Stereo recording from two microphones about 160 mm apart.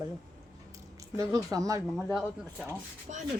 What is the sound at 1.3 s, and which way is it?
Speech, 20° right (ahead or behind).